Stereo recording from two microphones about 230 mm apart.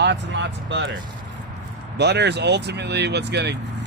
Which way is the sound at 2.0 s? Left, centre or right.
Right.